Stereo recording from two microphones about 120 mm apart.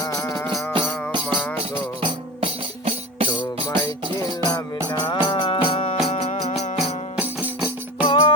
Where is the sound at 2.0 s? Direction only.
55° right (ahead or behind).